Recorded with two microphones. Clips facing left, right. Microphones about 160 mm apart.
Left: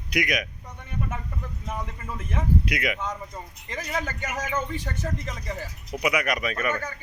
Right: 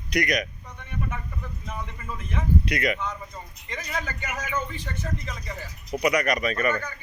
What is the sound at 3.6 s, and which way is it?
Speech, 40° left (ahead or behind).